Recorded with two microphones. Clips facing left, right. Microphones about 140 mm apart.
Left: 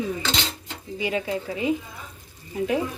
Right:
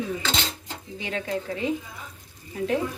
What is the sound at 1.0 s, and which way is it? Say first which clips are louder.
Speech: left 3 dB; 10° left (ahead or behind).